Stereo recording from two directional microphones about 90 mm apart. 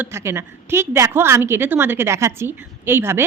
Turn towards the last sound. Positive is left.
turn(degrees=-25)  # may be behind; listen again after turning